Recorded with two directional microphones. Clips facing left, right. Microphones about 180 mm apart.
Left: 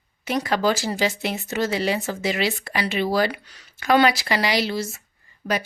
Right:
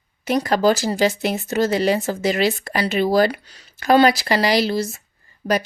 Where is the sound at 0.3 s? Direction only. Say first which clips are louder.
Right 4 dB; 40° right (ahead or behind).